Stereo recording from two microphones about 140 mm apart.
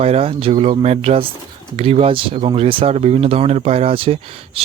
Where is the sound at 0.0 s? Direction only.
45° right (ahead or behind).